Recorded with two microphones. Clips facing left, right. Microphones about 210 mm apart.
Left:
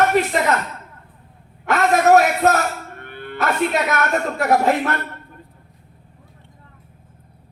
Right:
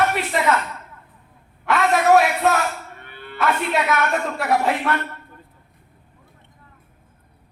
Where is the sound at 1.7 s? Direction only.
40° left (ahead or behind).